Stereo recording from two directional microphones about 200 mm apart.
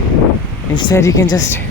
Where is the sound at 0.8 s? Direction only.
20° left (ahead or behind).